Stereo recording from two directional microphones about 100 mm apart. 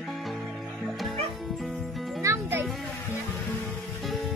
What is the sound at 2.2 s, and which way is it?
Music, 30° right (ahead or behind).